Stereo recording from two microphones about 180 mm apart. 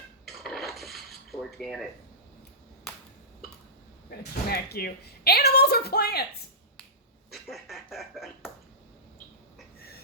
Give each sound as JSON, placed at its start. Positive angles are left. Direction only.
{"t": 0.3, "sound": "dishes", "side_deg": 0}
{"t": 4.1, "sound": "speech", "side_deg": 60}
{"t": 7.3, "sound": "a sound", "side_deg": 0}